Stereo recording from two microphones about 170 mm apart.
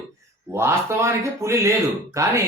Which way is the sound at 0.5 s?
15° right (ahead or behind).